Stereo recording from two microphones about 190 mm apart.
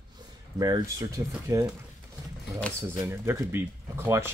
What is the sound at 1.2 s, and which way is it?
Speech, 15° right (ahead or behind).